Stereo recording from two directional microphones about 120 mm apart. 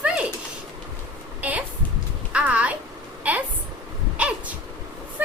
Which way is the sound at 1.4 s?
10° right (ahead or behind).